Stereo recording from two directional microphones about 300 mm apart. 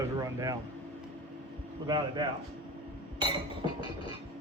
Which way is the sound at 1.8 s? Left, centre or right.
Centre.